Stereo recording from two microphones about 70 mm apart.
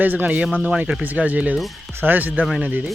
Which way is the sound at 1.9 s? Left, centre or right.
Right.